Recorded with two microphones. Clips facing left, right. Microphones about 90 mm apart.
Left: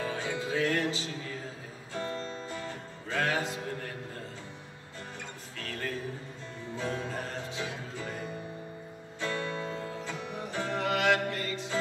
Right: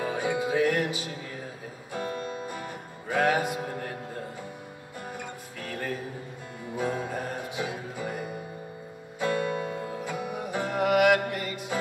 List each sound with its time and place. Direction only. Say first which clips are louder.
0.0 s music: right 5 dB; 15° right (ahead or behind)
5.2 s music: right 4 dB; 15° right (ahead or behind)